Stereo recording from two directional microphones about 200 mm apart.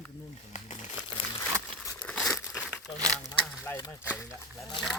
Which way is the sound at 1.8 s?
5° left (ahead or behind).